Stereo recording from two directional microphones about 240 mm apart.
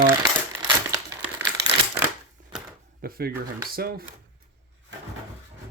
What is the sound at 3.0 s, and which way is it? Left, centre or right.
Speech, right.